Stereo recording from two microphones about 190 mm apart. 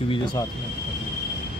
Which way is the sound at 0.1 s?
25° left (ahead or behind).